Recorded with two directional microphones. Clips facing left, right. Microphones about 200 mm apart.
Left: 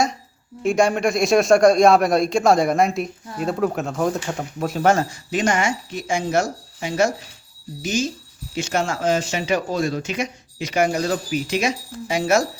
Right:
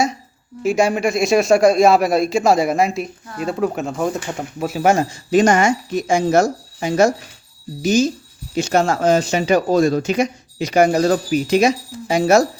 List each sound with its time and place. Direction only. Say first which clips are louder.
0.6 s speech: right 1 dB; 5° right (ahead or behind)
5.3 s speech: right 7 dB; 45° right (ahead or behind)